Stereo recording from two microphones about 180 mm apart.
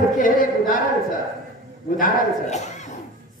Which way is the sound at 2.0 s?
40° left (ahead or behind).